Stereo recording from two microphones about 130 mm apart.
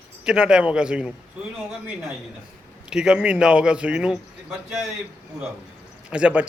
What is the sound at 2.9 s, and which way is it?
Speech, 5° right (ahead or behind).